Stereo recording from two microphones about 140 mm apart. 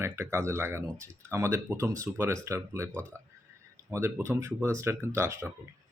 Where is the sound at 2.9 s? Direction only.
10° left (ahead or behind).